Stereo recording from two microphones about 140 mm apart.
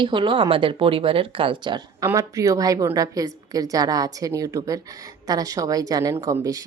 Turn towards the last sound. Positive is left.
turn(degrees=-25)  # may be behind; listen again after turning